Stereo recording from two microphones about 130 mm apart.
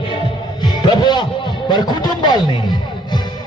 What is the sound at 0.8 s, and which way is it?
A man's voice, 35° left (ahead or behind).